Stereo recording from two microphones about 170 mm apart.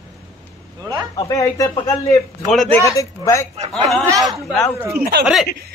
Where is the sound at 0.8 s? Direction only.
25° right (ahead or behind).